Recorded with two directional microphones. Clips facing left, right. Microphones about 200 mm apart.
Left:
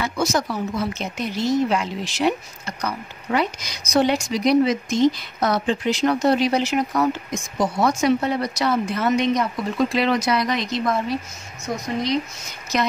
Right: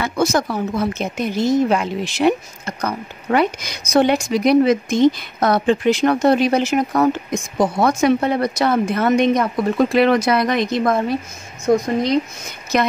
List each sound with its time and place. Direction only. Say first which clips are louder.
0.0 s speech: right 4 dB; 55° right (ahead or behind)